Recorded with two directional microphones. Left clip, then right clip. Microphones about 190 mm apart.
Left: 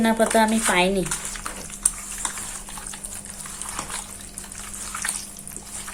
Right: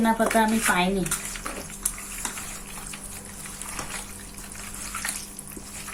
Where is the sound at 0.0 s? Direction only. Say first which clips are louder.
Left 3 dB; 50° left (ahead or behind).